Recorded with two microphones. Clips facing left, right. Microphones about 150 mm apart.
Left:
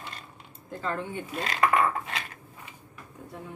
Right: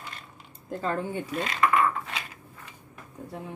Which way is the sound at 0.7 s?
40° right (ahead or behind).